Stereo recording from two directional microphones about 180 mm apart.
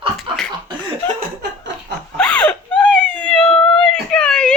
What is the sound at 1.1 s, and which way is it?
Laughter, 70° right (ahead or behind).